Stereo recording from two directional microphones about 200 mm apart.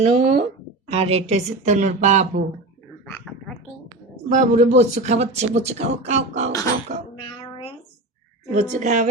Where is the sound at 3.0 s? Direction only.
5° left (ahead or behind).